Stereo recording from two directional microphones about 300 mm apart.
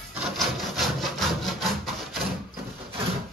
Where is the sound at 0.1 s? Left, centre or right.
Centre.